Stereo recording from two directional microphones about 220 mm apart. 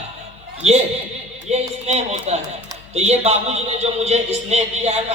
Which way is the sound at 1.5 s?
30° right (ahead or behind).